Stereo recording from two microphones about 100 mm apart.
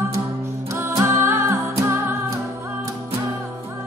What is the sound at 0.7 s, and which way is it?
Music, 25° right (ahead or behind).